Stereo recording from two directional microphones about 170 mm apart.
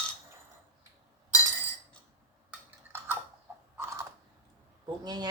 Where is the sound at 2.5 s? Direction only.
10° right (ahead or behind).